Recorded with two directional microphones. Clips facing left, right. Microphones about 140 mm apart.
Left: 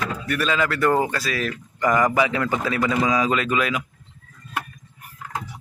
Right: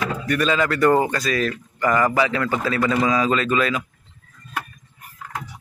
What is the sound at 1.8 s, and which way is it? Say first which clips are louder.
A man's voice: even; 15° left (ahead or behind).